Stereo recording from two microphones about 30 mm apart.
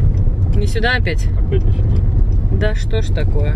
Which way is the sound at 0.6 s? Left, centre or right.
Centre.